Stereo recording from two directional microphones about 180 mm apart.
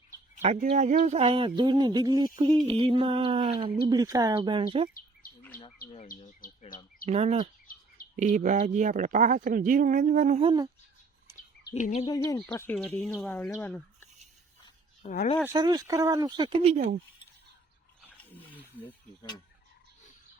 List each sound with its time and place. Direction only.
0.4 s speech: 35° right (ahead or behind)
6.4 s speech: 50° left (ahead or behind)
7.0 s speech: 35° right (ahead or behind)
10.4 s speech: 20° right (ahead or behind)
12.0 s speech: 20° left (ahead or behind)
15.0 s speech: 55° left (ahead or behind)
15.4 s speech: 20° right (ahead or behind)
18.0 s roaring cats: 10° left (ahead or behind)